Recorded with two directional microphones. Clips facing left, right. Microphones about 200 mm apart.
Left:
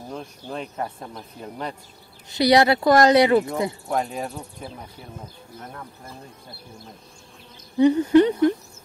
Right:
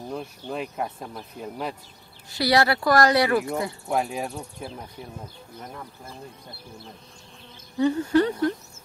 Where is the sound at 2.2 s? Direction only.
20° left (ahead or behind).